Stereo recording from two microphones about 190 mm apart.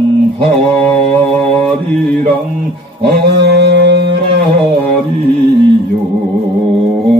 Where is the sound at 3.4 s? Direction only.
65° right (ahead or behind).